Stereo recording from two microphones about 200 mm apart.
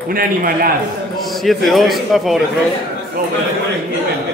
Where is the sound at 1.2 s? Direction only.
Centre (ahead or behind).